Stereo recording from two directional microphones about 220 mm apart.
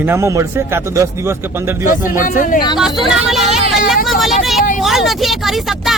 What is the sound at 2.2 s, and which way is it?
Speech, 35° left (ahead or behind).